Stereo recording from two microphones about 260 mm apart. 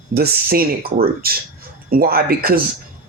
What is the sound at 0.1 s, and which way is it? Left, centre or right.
Speech, right.